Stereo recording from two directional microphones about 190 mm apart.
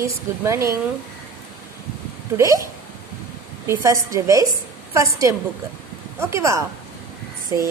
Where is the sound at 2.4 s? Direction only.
15° right (ahead or behind).